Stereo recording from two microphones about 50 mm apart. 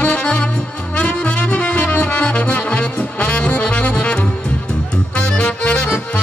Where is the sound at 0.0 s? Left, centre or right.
Left.